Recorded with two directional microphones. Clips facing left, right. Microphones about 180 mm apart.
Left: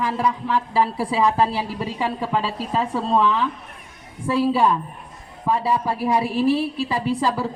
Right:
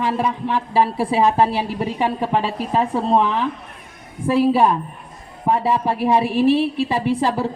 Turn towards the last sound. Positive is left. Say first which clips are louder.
# right 3 dB
turn(degrees=-25)  # may be behind; listen again after turning